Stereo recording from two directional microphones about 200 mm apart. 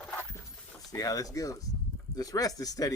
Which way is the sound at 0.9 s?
15° left (ahead or behind).